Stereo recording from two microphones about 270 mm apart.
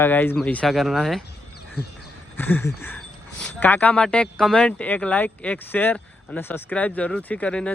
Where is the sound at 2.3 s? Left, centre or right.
Centre.